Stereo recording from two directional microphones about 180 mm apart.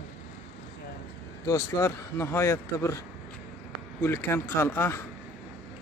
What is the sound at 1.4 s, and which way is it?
Speech, 15° left (ahead or behind).